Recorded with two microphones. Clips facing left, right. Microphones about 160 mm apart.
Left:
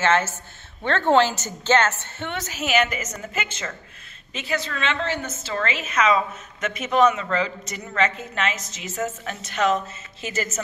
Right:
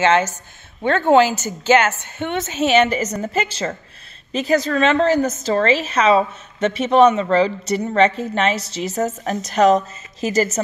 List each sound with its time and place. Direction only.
0.0 s a woman's voice: 15° right (ahead or behind); by 10.6 s 35° right (ahead or behind)